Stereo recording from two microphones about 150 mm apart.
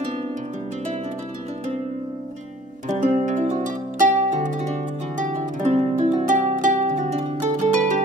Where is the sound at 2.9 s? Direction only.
55° right (ahead or behind).